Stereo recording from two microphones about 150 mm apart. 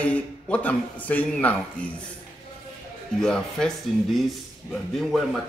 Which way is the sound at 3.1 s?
5° left (ahead or behind).